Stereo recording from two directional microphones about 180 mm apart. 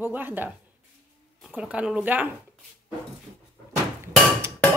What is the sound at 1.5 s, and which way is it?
Speech, 5° right (ahead or behind).